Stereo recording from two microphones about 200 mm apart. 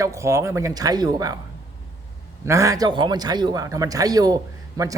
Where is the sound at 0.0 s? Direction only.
15° right (ahead or behind).